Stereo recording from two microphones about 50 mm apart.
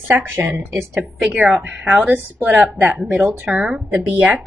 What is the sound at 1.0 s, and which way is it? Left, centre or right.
Speech, right.